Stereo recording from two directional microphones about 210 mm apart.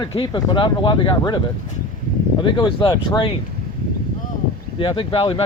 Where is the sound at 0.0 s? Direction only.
20° left (ahead or behind).